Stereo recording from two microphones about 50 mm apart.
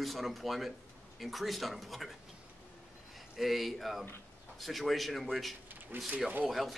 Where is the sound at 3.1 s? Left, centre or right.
Centre.